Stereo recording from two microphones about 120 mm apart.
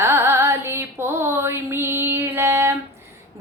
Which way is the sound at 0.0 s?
20° right (ahead or behind).